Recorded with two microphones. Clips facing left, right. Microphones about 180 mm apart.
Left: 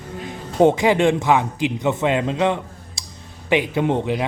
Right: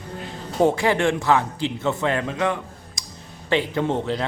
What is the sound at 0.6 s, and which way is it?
A man's voice, 20° left (ahead or behind).